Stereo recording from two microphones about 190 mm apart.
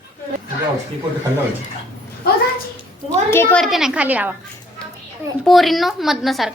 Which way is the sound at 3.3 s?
10° left (ahead or behind).